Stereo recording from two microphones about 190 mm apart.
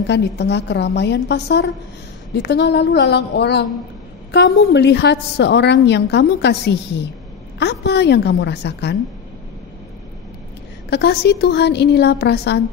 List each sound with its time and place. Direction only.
0.0 s a woman's voice: 65° left (ahead or behind)
10.9 s a woman's voice: 60° left (ahead or behind)